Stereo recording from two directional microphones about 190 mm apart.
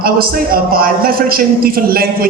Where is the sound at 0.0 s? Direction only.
50° right (ahead or behind).